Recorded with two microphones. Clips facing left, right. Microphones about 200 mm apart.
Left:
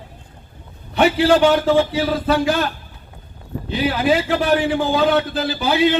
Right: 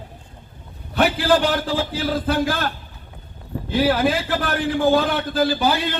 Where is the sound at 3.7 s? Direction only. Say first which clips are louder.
Even; 50° right (ahead or behind).